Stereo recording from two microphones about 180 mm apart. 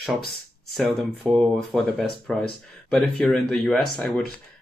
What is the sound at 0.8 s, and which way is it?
Speech, centre (ahead or behind).